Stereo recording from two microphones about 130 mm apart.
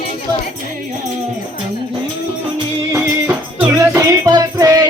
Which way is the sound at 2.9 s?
20° right (ahead or behind).